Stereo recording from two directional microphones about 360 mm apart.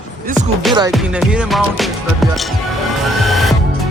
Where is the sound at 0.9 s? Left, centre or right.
Centre.